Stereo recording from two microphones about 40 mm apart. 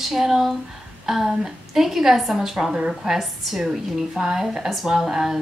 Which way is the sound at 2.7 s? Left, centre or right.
Right.